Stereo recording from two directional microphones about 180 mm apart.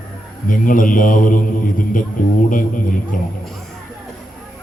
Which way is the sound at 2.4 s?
45° left (ahead or behind).